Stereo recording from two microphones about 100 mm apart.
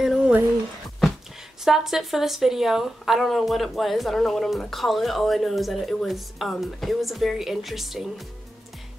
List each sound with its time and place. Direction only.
0.0 s music: 5° right (ahead or behind)
1.6 s a woman's voice: 5° right (ahead or behind)